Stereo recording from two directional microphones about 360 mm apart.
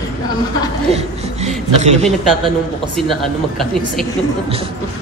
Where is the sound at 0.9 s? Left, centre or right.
Centre.